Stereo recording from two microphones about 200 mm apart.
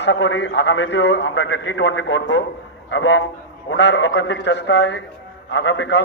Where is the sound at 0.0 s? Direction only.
65° left (ahead or behind).